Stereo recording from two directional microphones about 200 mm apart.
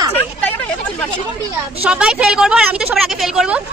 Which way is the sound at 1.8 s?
5° right (ahead or behind).